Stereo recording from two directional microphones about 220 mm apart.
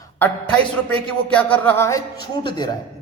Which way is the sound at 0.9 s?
5° left (ahead or behind).